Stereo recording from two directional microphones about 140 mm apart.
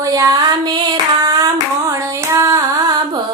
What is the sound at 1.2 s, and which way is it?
Hands, 25° right (ahead or behind).